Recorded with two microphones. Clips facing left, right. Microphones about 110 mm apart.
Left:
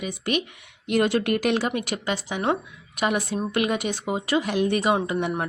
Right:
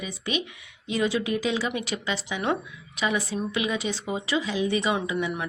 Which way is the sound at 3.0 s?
60° left (ahead or behind).